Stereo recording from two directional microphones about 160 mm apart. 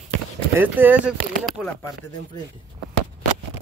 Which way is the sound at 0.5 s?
10° right (ahead or behind).